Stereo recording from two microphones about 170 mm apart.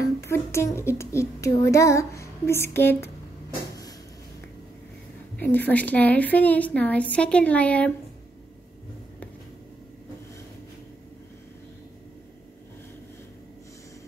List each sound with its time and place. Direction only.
0.0 s speech: 15° left (ahead or behind)
5.4 s speech: 10° left (ahead or behind)